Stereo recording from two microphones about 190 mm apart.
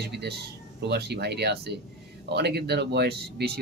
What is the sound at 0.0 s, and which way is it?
Speech, 60° right (ahead or behind).